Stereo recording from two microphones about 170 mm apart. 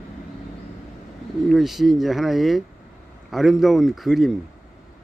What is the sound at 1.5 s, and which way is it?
Speech, centre (ahead or behind).